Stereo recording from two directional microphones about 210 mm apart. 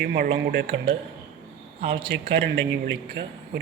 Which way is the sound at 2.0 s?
50° right (ahead or behind).